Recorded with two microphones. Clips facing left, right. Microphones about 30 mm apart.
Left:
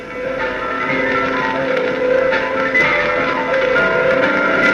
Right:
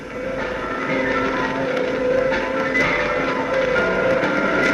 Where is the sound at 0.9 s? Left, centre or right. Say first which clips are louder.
Left 2 dB; left.